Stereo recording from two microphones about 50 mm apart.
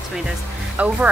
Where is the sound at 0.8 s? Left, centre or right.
Right.